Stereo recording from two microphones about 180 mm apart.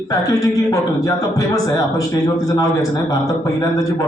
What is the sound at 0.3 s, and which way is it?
A man's voice, 20° left (ahead or behind).